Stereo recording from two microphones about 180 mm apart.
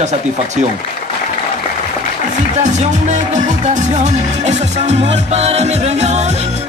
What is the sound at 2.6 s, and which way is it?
Music, 40° right (ahead or behind).